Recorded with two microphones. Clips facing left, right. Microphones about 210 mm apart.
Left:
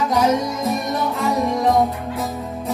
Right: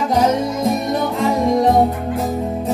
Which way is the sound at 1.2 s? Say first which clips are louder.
Right 4 dB; 30° right (ahead or behind).